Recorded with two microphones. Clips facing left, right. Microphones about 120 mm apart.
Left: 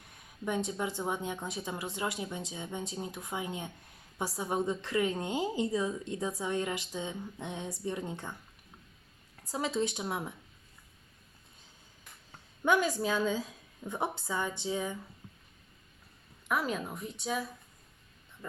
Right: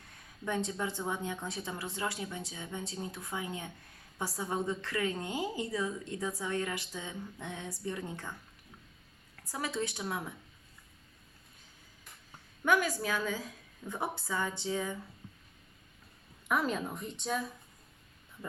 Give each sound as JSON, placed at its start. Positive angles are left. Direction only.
{"t": 0.4, "sound": "a woman's voice", "side_deg": 15}
{"t": 9.5, "sound": "a woman's voice", "side_deg": 20}
{"t": 12.6, "sound": "a woman's voice", "side_deg": 20}
{"t": 16.5, "sound": "speech", "side_deg": 5}